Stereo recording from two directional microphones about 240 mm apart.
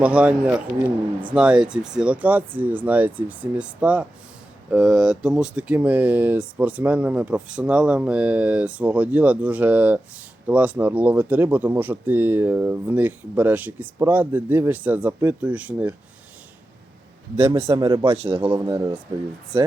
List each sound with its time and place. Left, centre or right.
0.0 s speech: centre
17.4 s a man's voice: right
18.4 s speech: centre